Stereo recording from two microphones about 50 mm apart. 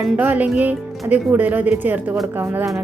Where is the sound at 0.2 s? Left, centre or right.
Right.